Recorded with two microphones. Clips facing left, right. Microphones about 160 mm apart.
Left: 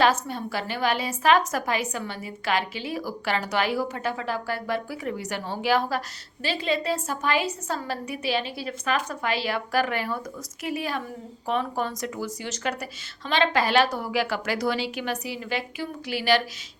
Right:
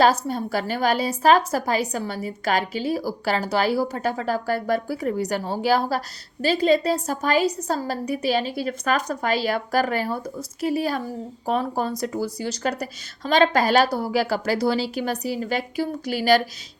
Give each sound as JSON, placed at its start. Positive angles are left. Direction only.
{"t": 0.0, "sound": "a woman's voice", "side_deg": -40}